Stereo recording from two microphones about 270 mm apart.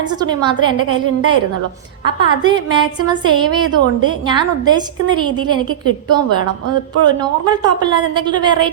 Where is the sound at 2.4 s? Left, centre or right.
Centre.